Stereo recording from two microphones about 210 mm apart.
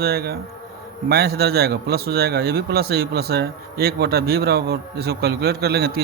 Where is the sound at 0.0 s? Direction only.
50° right (ahead or behind).